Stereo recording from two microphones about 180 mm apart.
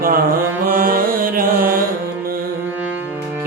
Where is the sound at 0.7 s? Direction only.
50° right (ahead or behind).